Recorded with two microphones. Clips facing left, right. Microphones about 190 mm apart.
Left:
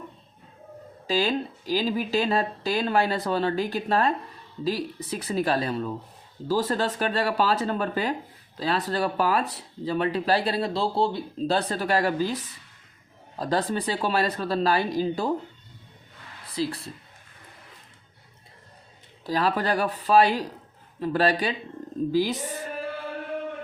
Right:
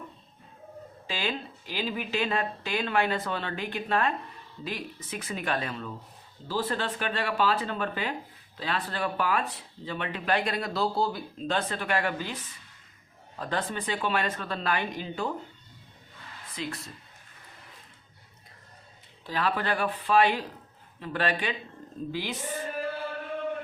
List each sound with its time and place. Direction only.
1.0 s speech: 40° left (ahead or behind)
16.6 s speech: 35° left (ahead or behind)
19.2 s speech: 40° left (ahead or behind)